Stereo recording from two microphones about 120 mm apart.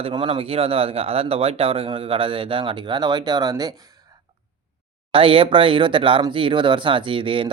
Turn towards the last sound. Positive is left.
turn(degrees=-45)  # may be behind; listen again after turning